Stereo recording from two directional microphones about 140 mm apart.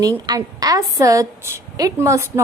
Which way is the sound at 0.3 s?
25° right (ahead or behind).